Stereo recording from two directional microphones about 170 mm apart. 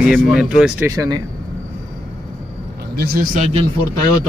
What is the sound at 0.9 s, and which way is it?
Speech, 20° right (ahead or behind).